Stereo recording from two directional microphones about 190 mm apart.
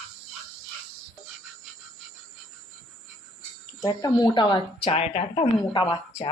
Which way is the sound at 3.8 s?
20° left (ahead or behind).